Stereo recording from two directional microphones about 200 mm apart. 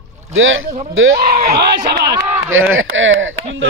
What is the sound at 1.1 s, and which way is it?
Speech, 45° right (ahead or behind).